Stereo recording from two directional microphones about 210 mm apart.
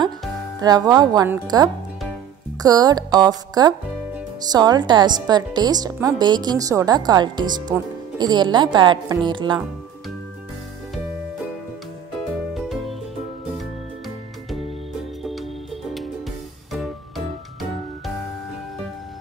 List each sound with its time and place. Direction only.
0.6 s speech: 20° right (ahead or behind)
12.5 s music: centre (ahead or behind)